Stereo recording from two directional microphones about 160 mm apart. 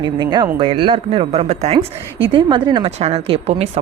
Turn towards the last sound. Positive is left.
turn(degrees=-40)  # may be behind; listen again after turning